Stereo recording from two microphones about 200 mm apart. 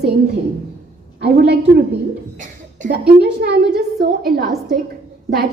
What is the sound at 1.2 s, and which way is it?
Speech, 55° right (ahead or behind).